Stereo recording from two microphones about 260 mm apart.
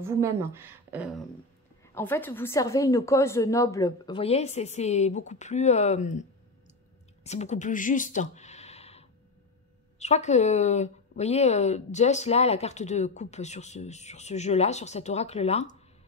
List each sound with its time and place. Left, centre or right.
0.0 s speech: centre
2.0 s a woman's voice: centre; by 6.2 s left
7.2 s a woman's voice: left